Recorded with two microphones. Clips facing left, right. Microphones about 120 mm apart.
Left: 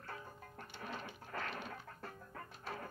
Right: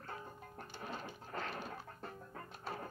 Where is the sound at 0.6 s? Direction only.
20° right (ahead or behind).